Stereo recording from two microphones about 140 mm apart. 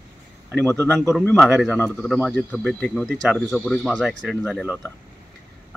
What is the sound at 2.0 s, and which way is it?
Speech, 5° right (ahead or behind).